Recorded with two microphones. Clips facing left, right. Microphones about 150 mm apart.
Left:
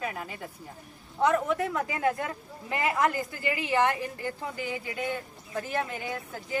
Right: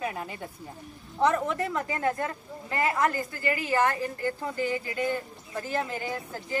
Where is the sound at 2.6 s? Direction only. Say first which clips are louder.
Even; 15° left (ahead or behind).